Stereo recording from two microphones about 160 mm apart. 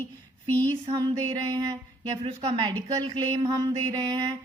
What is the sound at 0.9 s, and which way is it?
Speech, 25° right (ahead or behind).